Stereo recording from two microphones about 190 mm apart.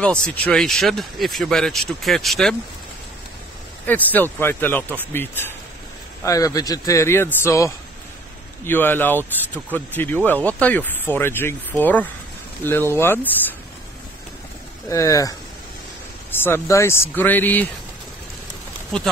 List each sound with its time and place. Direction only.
0.0 s speech: 5° left (ahead or behind)
3.8 s speech: 10° left (ahead or behind)
14.9 s speech: 15° left (ahead or behind)